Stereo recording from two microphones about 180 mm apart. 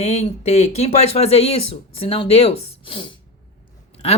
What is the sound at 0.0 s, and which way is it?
Speech, 40° left (ahead or behind).